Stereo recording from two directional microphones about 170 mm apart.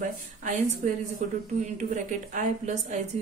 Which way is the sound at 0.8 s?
50° right (ahead or behind).